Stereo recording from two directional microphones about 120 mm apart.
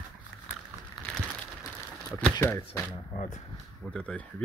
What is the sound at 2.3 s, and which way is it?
Speech, 25° left (ahead or behind).